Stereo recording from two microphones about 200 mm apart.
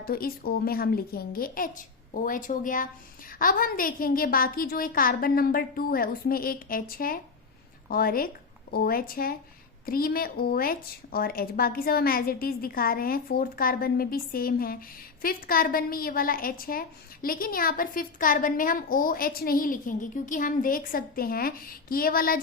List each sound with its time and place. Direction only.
0.0 s a woman's voice: 50° left (ahead or behind)